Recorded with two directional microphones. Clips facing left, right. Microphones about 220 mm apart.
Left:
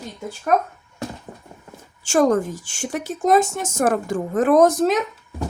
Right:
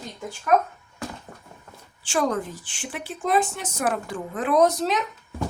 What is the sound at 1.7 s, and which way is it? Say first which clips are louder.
Speech: left 7 dB; 45° left (ahead or behind).